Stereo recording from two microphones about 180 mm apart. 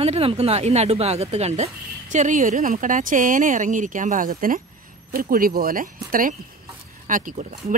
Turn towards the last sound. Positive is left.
turn(degrees=-50)  # may be behind; listen again after turning